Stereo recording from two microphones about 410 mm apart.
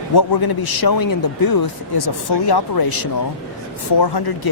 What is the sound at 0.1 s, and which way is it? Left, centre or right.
A man's voice, left.